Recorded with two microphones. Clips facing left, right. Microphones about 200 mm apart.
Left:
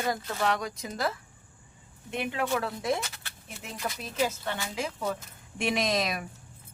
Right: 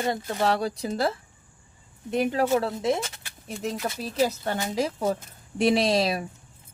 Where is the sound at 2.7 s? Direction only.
25° right (ahead or behind).